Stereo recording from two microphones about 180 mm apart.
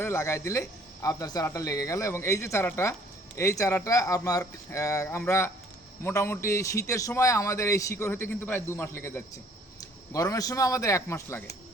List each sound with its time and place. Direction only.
0.0 s a man's voice: 15° left (ahead or behind)